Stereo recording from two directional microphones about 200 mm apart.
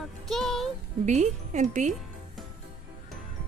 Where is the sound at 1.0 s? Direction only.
35° right (ahead or behind).